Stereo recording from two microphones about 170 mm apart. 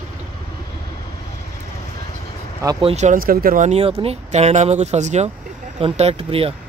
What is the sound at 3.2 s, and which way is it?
Speech, 60° right (ahead or behind).